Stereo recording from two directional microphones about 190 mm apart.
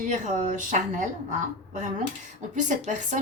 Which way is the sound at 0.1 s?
40° right (ahead or behind).